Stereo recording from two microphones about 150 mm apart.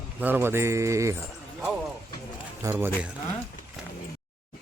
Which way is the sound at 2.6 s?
15° right (ahead or behind).